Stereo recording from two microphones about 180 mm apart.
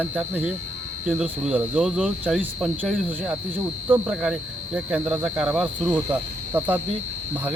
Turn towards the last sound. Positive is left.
turn(degrees=-10)  # may be behind; listen again after turning